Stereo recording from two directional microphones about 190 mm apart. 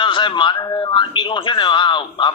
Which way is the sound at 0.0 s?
25° left (ahead or behind).